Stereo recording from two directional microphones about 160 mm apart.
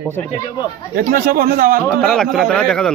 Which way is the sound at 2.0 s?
5° left (ahead or behind).